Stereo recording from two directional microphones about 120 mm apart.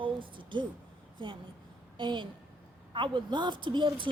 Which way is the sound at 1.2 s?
40° right (ahead or behind).